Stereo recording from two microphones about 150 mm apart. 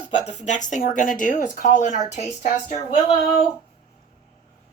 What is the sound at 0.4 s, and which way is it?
Speech, 55° left (ahead or behind).